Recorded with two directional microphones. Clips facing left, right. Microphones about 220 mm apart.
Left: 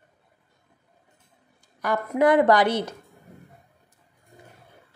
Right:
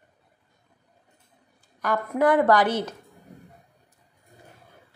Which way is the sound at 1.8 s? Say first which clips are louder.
Left 1 dB; 10° left (ahead or behind).